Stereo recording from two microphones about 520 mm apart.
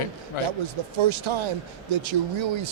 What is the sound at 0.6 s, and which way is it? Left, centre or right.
Speech, right.